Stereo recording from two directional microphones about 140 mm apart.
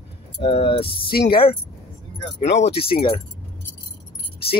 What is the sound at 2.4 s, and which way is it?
Speech, 50° left (ahead or behind).